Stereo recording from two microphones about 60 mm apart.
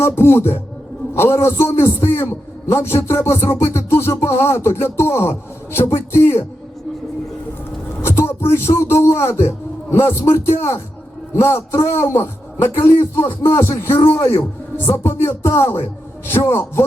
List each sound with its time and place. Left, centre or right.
0.0 s a sound: left
1.1 s music: left
8.0 s a man's voice: left
11.3 s music: left